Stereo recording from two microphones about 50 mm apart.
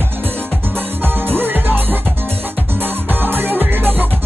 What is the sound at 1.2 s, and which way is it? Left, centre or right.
Music, right.